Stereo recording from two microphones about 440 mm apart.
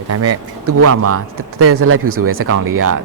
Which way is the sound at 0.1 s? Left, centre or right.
Right.